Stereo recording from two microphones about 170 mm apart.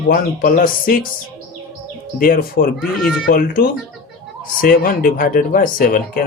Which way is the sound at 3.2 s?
60° left (ahead or behind).